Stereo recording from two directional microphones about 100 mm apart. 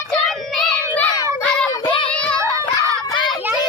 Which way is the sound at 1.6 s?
50° left (ahead or behind).